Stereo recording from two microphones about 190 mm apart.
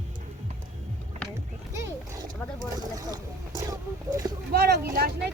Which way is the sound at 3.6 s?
15° right (ahead or behind).